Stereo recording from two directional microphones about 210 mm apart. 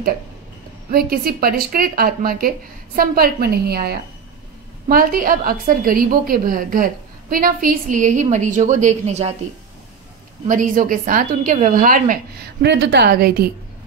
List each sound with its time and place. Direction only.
0.9 s a woman's voice: 45° right (ahead or behind)
10.4 s a woman's voice: 40° right (ahead or behind)
12.6 s a woman's voice: 55° right (ahead or behind)